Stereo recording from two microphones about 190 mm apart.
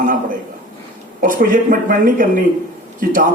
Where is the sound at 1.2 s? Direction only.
45° right (ahead or behind).